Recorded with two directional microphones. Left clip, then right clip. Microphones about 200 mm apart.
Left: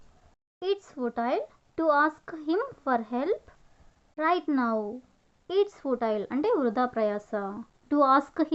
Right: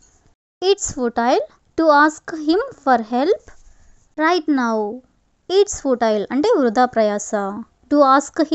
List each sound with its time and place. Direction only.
0.6 s a child's voice: 45° right (ahead or behind)